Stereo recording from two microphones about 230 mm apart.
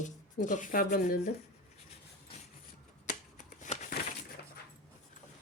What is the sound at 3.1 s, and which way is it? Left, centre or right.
Shuffling cards, left.